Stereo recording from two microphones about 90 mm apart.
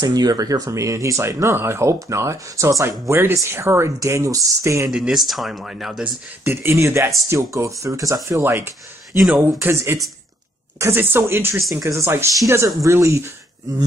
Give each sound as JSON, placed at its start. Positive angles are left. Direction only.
{"t": 0.0, "sound": "speech", "side_deg": -45}
{"t": 4.9, "sound": "speech", "side_deg": -5}
{"t": 6.4, "sound": "speech", "side_deg": -25}